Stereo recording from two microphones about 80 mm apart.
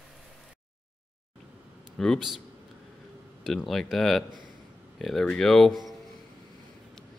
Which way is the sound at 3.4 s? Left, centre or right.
Centre.